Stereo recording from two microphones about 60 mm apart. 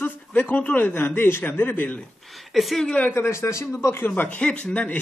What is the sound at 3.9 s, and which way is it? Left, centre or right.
Speech, left.